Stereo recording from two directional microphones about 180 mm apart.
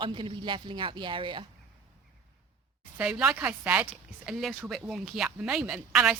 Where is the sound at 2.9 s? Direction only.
5° right (ahead or behind).